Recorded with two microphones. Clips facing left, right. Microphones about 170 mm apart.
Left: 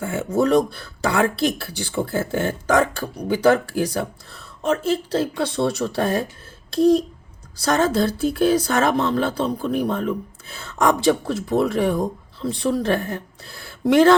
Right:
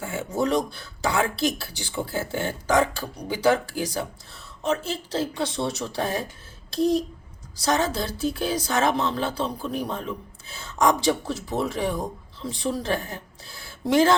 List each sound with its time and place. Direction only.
0.3 s speech: 55° left (ahead or behind)